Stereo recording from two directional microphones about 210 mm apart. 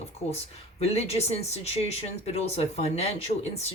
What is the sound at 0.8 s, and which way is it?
Speech, 30° left (ahead or behind).